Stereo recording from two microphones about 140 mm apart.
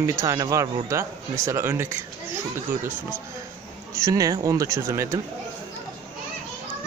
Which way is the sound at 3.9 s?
25° right (ahead or behind).